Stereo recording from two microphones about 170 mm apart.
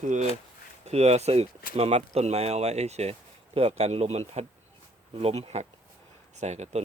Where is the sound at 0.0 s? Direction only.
45° right (ahead or behind).